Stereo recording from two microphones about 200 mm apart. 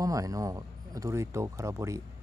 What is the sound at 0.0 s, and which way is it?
Speech, 15° right (ahead or behind).